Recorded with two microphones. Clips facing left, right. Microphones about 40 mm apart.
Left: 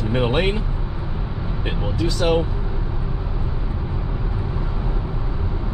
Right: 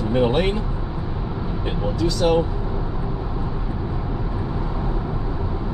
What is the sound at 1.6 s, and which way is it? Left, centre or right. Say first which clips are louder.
Speech: right 1 dB; left.